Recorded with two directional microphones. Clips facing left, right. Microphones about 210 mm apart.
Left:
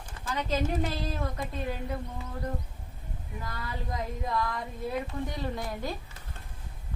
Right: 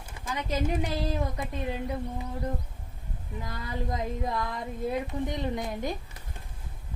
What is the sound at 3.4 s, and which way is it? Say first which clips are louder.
Speech: right 4 dB; 20° right (ahead or behind).